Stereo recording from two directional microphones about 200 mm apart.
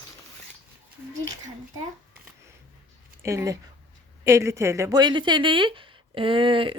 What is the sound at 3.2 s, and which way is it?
Speech, 15° right (ahead or behind).